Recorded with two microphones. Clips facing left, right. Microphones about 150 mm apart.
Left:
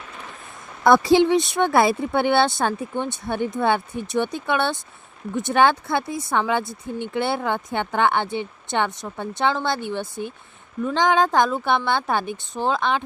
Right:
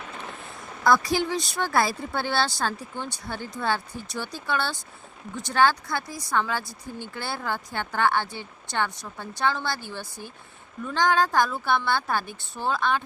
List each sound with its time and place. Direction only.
0.9 s speech: 25° left (ahead or behind)